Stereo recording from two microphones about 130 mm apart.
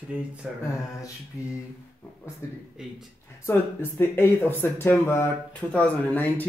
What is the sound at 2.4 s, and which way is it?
Speech, 25° left (ahead or behind).